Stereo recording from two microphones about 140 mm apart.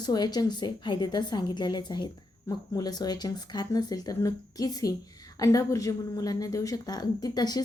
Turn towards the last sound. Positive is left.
turn(degrees=30)  # may be behind; listen again after turning